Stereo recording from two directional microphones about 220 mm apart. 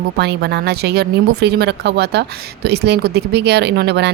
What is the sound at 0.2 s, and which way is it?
Speech, 50° right (ahead or behind).